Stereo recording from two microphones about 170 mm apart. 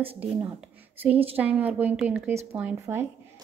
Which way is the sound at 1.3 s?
10° right (ahead or behind).